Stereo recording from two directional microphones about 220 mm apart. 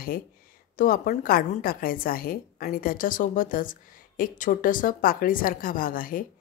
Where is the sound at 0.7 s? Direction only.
40° left (ahead or behind).